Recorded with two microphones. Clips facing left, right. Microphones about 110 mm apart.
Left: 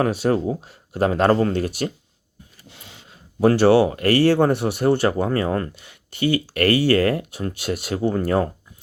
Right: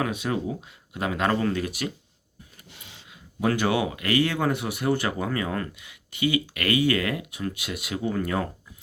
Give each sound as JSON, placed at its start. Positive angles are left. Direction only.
{"t": 0.0, "sound": "speech", "side_deg": 40}
{"t": 3.1, "sound": "speech", "side_deg": 35}